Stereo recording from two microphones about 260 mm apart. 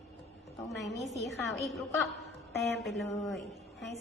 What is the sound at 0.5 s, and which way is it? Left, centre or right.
A woman's voice, centre.